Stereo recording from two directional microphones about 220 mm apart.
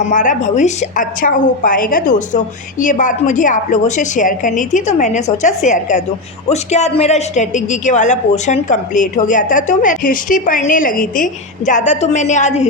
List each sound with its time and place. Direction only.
0.1 s a woman's voice: 35° left (ahead or behind)